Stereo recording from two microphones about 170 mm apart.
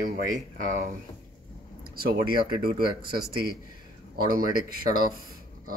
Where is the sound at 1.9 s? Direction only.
60° right (ahead or behind).